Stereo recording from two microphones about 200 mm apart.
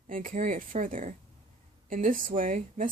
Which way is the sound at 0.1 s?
45° right (ahead or behind).